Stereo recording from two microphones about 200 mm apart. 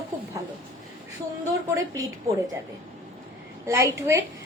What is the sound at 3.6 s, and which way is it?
Speech, 10° right (ahead or behind).